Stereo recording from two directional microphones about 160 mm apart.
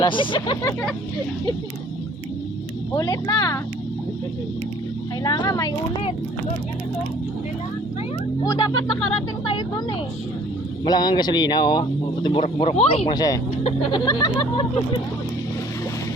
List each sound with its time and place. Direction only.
0.0 s speech: 30° left (ahead or behind)
2.9 s a man's voice: 25° left (ahead or behind)
5.2 s a man's voice: 25° left (ahead or behind)
8.4 s a man's voice: 25° left (ahead or behind)
9.5 s vehicle: 25° left (ahead or behind)
10.8 s a man's voice: 25° left (ahead or behind)
13.1 s a man's voice: 25° left (ahead or behind)